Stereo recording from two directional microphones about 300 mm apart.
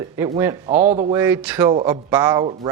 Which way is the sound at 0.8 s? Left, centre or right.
Right.